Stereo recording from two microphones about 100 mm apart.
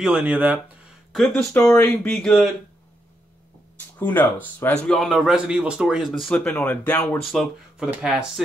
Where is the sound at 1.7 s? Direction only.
15° left (ahead or behind).